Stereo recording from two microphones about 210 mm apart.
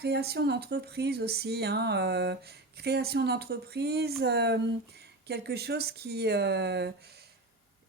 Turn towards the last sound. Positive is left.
turn(degrees=-50)  # may be behind; listen again after turning